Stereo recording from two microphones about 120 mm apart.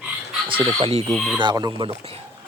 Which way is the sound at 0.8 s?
50° right (ahead or behind).